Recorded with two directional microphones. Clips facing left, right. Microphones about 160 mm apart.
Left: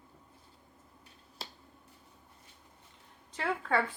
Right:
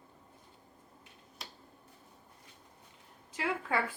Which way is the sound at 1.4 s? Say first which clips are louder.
Left 3 dB; 30° left (ahead or behind).